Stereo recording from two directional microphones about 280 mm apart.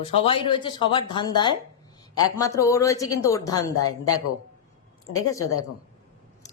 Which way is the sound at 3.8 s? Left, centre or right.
Left.